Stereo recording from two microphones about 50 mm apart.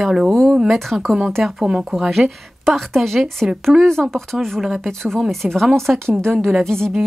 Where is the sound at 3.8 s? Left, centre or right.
Centre.